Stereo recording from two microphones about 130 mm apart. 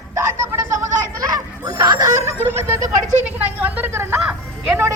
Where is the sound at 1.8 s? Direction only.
30° right (ahead or behind).